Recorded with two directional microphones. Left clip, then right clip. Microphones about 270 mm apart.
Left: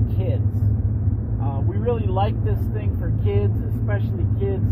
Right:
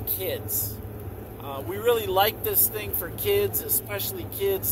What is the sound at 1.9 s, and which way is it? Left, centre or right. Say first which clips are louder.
Speech: right 2 dB; right.